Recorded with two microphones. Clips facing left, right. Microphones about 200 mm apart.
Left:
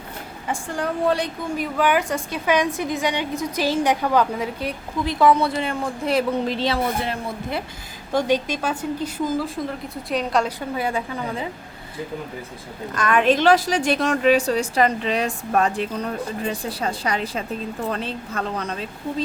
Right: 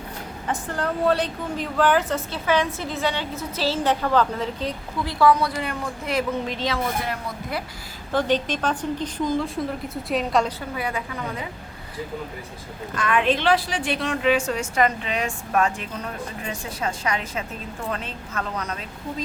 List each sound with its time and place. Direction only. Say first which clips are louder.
0.4 s a woman's voice: left 1 dB; 10° left (ahead or behind); by 7.6 s 25° left (ahead or behind)
8.1 s a woman's voice: left 1 dB; 10° left (ahead or behind)
10.8 s a woman's voice: left 5 dB; 30° left (ahead or behind)
13.0 s a woman's voice: left 4 dB; 40° left (ahead or behind)